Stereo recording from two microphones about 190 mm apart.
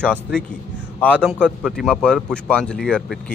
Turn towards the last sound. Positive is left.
turn(degrees=5)  # may be behind; listen again after turning